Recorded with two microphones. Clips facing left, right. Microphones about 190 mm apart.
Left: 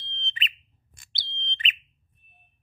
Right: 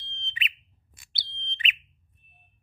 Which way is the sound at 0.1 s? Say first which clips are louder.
Left 1 dB; 10° right (ahead or behind).